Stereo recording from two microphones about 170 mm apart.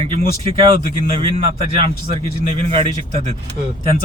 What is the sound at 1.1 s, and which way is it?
Speech, 35° right (ahead or behind).